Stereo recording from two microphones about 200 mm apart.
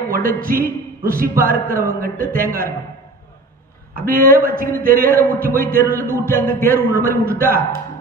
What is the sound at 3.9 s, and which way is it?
Speech, 45° right (ahead or behind).